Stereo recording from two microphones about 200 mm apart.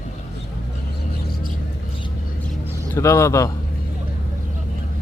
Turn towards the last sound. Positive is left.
turn(degrees=15)  # may be behind; listen again after turning